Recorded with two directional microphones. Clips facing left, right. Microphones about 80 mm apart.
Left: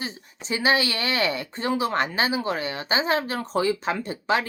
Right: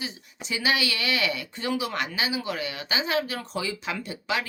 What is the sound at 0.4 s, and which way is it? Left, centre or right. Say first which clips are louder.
Speech: left 4 dB; left.